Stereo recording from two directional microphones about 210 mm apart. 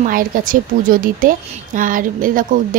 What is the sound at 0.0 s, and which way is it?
Speech, 40° right (ahead or behind).